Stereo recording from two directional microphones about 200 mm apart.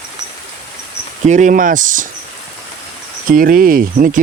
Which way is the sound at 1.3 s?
40° right (ahead or behind).